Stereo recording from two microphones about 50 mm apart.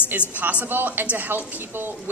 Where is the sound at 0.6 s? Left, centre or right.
Right.